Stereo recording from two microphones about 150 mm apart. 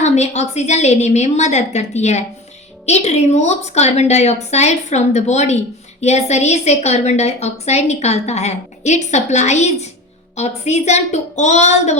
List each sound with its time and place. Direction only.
0.0 s a woman's voice: 50° left (ahead or behind)